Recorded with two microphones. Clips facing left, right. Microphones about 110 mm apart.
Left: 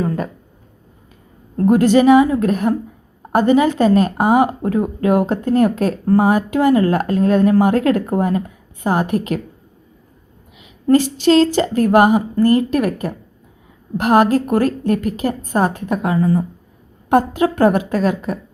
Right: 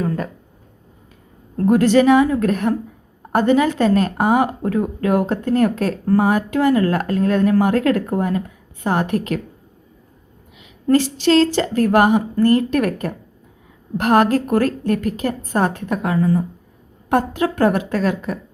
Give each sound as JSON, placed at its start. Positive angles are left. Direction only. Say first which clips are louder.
{"t": 1.5, "sound": "a woman's voice", "louder": "left 1 dB", "side_deg": 15}
{"t": 10.8, "sound": "a woman's voice", "louder": "left 2 dB", "side_deg": 15}